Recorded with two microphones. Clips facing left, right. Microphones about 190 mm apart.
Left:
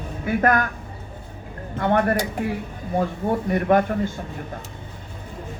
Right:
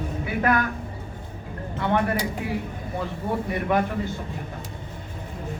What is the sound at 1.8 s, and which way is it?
Speech, 45° left (ahead or behind).